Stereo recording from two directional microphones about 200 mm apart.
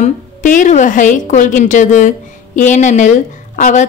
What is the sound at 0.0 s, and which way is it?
A woman's voice, 40° left (ahead or behind).